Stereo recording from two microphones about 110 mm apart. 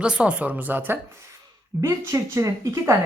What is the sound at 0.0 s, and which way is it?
Speech, 10° right (ahead or behind).